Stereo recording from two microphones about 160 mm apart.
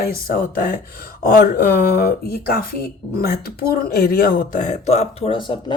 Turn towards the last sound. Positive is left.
turn(degrees=30)  # may be behind; listen again after turning